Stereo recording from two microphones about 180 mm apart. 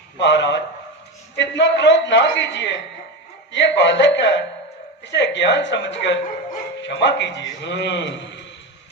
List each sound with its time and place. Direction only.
0.2 s a man's voice: 75° left (ahead or behind)